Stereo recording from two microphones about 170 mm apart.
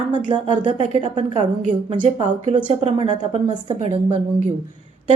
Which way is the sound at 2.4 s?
35° right (ahead or behind).